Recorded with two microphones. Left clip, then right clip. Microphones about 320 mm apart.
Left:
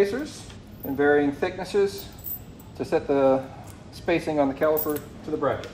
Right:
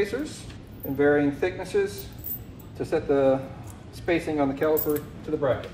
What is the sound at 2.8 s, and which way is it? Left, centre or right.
Speech, left.